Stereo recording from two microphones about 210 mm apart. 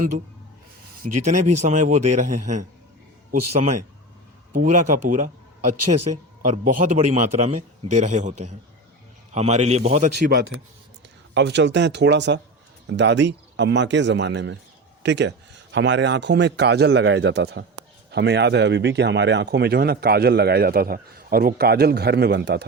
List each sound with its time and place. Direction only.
1.0 s speech: 35° right (ahead or behind)
10.2 s a man's voice: 50° right (ahead or behind)